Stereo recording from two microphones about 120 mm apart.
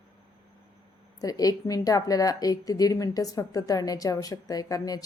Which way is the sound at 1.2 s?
30° left (ahead or behind).